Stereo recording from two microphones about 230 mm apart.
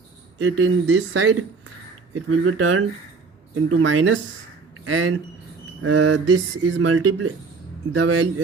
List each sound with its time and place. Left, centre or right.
0.3 s speech: right
6.8 s speech: right